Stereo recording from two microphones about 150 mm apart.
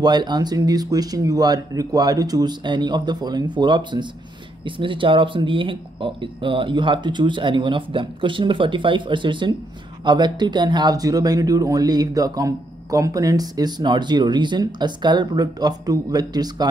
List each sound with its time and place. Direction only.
0.0 s speech: 30° right (ahead or behind)